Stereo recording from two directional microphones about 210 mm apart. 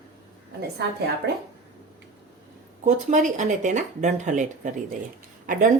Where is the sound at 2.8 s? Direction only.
35° right (ahead or behind).